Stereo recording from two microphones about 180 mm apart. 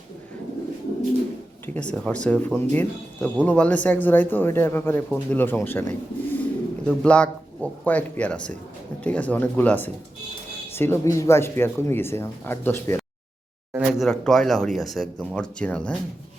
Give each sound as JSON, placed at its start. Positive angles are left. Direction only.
{"t": 1.6, "sound": "speech", "side_deg": 10}
{"t": 13.7, "sound": "speech", "side_deg": 0}